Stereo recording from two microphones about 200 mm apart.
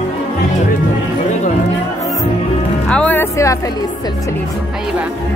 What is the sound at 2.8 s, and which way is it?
Speech, 5° left (ahead or behind).